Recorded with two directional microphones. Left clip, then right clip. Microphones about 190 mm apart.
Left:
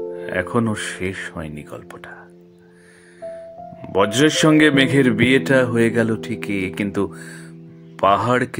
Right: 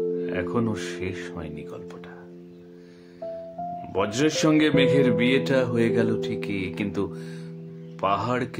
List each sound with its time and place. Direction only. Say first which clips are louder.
0.3 s a man's voice: left 5 dB; 35° left (ahead or behind)
3.9 s a man's voice: left 8 dB; 45° left (ahead or behind)